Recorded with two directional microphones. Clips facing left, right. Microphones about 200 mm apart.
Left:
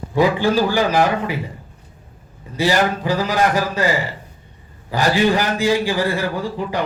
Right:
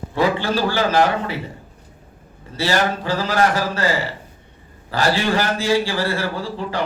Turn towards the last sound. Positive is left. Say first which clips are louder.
# left 2 dB
turn(degrees=15)  # may be behind; listen again after turning